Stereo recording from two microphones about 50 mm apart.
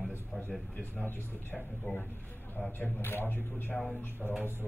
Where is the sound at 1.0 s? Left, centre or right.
Left.